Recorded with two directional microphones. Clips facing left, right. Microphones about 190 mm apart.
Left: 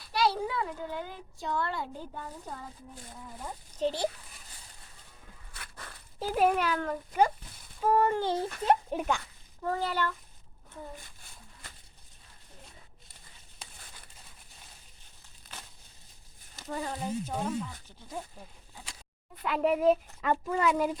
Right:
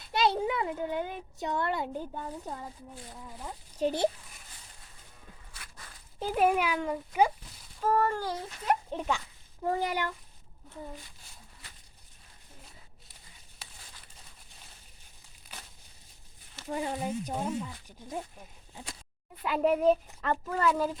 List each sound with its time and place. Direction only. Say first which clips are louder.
0.0 s a child's voice: right 1 dB; 20° right (ahead or behind)
5.5 s dog: left 6 dB; 55° left (ahead or behind)
6.1 s speech: even; centre (ahead or behind)
7.8 s a child's voice: left 2 dB; 15° left (ahead or behind)
8.9 s a child's voice: left 3 dB; 10° left (ahead or behind)
9.6 s speech: right 1 dB; 15° right (ahead or behind)
16.6 s speech: right 2 dB; 15° right (ahead or behind)
19.4 s a woman's voice: right 1 dB; centre (ahead or behind)